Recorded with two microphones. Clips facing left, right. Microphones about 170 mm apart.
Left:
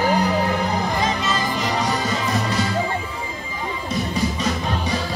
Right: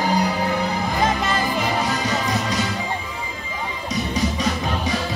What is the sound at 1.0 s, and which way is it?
Music, 55° right (ahead or behind).